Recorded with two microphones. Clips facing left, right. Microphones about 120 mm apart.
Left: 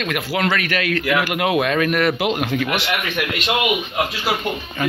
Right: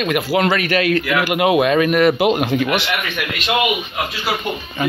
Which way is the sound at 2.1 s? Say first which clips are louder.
Right 4 dB; 20° right (ahead or behind).